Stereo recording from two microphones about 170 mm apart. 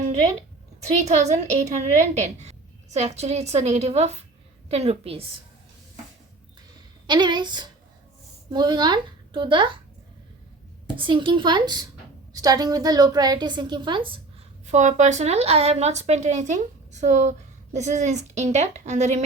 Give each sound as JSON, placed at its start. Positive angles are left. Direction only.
{"t": 0.8, "sound": "a woman's voice", "side_deg": -40}
{"t": 7.1, "sound": "a woman's voice", "side_deg": -25}
{"t": 10.9, "sound": "a woman's voice", "side_deg": -30}
{"t": 14.7, "sound": "speech", "side_deg": -45}